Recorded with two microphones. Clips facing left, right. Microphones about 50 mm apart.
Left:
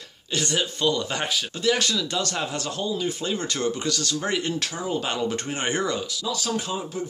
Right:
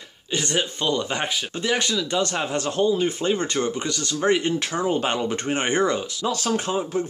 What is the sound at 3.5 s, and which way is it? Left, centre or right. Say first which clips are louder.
Speech: right 1 dB; right.